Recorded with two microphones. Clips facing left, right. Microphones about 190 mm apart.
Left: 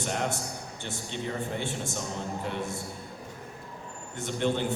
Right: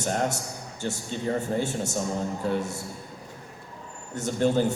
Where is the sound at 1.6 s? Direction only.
40° right (ahead or behind).